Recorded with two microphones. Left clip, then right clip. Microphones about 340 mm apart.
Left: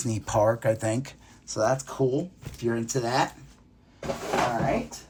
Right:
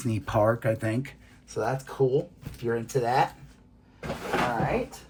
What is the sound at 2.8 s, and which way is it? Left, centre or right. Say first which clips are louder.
Speech: right 2 dB; centre.